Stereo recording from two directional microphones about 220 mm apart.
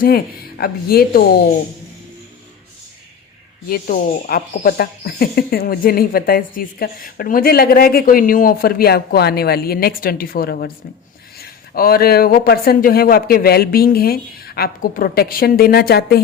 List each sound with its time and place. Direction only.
0.6 s speech: 45° left (ahead or behind)
3.7 s speech: 40° left (ahead or behind)